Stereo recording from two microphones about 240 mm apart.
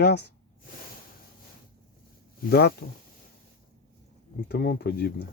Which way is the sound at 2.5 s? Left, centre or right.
Left.